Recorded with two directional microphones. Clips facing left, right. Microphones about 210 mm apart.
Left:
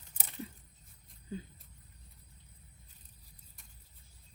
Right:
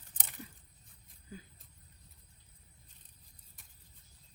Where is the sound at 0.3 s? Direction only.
30° left (ahead or behind).